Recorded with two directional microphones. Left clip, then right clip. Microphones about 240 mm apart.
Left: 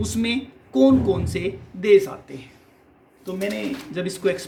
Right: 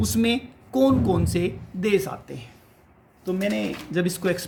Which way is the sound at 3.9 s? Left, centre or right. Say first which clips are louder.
Left 1 dB; right.